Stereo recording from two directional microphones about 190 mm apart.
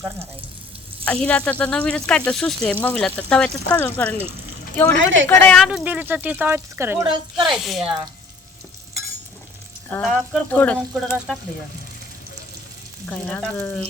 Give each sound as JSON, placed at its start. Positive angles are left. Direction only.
{"t": 1.0, "sound": "speech", "side_deg": 5}
{"t": 4.9, "sound": "speech", "side_deg": -75}
{"t": 5.3, "sound": "speech", "side_deg": 10}
{"t": 7.1, "sound": "speech", "side_deg": -25}
{"t": 7.6, "sound": "speech", "side_deg": 0}
{"t": 10.0, "sound": "speech", "side_deg": 5}
{"t": 13.1, "sound": "speech", "side_deg": 10}